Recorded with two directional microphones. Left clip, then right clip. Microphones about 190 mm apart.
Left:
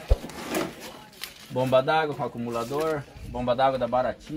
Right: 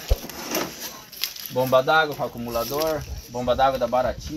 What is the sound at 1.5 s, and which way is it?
Speech, 15° left (ahead or behind).